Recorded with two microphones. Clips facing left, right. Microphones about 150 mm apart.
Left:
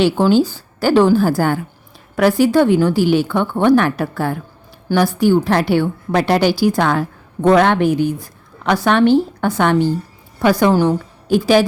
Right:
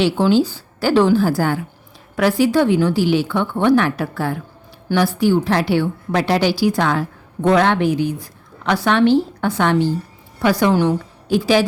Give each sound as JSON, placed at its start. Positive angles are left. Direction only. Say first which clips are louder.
{"t": 0.0, "sound": "a woman's voice", "louder": "left 2 dB", "side_deg": 50}